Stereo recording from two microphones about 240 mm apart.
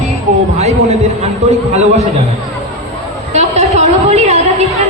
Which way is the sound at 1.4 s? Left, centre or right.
Right.